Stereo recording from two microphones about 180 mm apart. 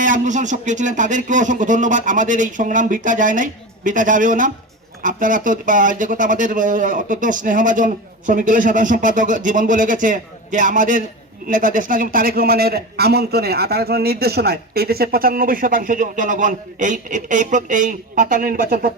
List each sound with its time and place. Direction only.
0.0 s a man's voice: 45° right (ahead or behind)